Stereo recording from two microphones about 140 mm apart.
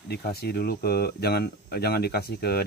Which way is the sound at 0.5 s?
90° left.